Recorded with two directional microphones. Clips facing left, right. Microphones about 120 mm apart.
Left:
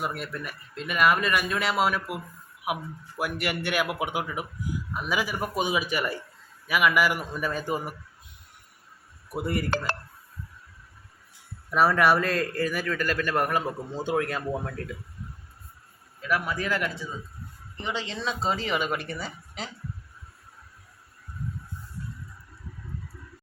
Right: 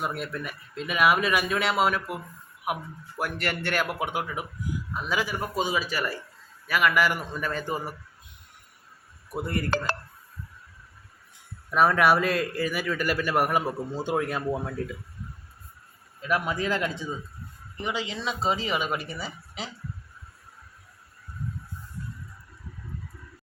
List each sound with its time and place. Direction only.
0.0 s a man's voice: centre (ahead or behind)
9.3 s a man's voice: 10° left (ahead or behind)
11.7 s a man's voice: centre (ahead or behind)
16.2 s a man's voice: 20° right (ahead or behind)
17.8 s speech: 10° right (ahead or behind)